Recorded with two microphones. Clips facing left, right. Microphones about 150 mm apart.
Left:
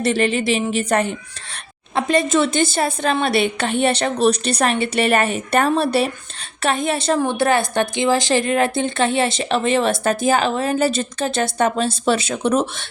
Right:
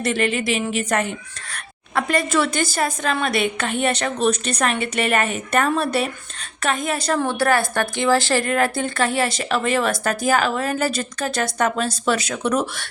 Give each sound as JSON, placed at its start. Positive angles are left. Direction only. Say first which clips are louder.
{"t": 0.0, "sound": "a woman's voice", "louder": "left 3 dB", "side_deg": 30}